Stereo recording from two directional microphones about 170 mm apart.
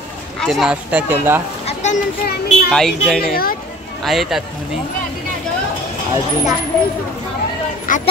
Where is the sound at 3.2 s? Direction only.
60° left (ahead or behind).